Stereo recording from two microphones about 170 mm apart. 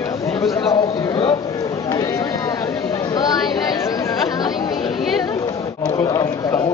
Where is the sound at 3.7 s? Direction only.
20° left (ahead or behind).